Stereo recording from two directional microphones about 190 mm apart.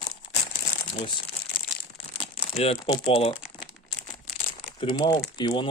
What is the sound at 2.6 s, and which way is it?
Speech, 25° left (ahead or behind).